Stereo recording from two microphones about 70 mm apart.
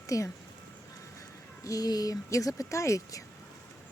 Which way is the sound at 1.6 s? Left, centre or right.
Left.